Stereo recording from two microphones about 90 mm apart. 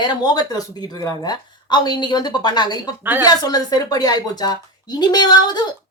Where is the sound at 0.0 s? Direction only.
50° left (ahead or behind).